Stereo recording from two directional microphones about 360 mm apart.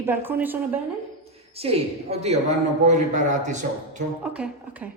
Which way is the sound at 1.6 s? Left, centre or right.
Centre.